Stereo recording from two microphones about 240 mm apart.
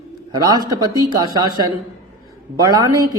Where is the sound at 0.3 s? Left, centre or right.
Centre.